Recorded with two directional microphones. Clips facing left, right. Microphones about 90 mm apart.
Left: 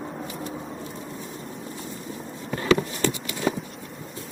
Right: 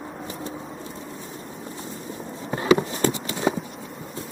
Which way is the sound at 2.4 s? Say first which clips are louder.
Right 2 dB; 25° right (ahead or behind).